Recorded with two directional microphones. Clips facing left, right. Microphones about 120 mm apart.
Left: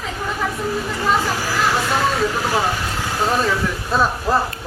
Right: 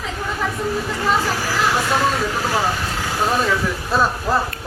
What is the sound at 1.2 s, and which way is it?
Speech, 15° left (ahead or behind).